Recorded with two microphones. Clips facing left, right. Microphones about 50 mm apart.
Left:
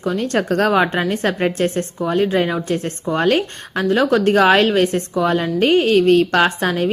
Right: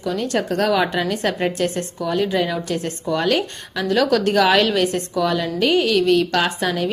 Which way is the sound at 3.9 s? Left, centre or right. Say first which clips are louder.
Left 2 dB; left.